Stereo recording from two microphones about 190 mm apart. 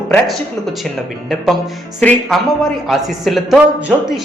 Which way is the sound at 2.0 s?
5° left (ahead or behind).